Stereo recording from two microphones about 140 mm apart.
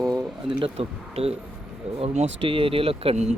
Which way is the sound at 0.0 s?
25° right (ahead or behind).